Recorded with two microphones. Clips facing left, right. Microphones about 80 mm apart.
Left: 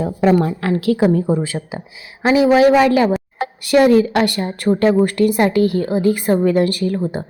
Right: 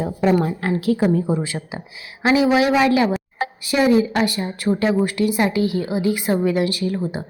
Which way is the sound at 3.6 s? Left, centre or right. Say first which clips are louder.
Left 5 dB; left.